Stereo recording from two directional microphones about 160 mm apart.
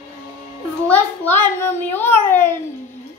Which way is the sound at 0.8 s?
10° left (ahead or behind).